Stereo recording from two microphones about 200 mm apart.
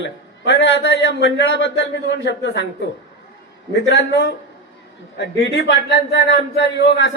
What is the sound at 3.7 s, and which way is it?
A man's voice, 60° left (ahead or behind).